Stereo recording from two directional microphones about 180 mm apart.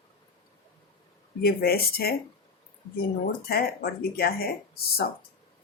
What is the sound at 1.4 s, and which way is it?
Speech, 55° left (ahead or behind).